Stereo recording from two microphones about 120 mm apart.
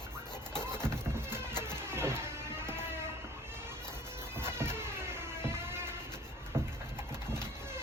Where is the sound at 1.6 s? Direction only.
20° right (ahead or behind).